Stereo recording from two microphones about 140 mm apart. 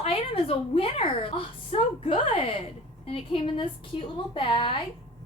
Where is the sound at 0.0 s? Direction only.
45° left (ahead or behind).